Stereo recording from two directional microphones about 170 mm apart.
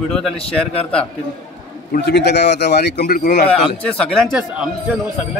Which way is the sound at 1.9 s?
80° left.